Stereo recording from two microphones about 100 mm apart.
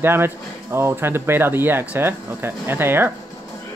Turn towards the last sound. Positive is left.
turn(degrees=-20)  # may be behind; listen again after turning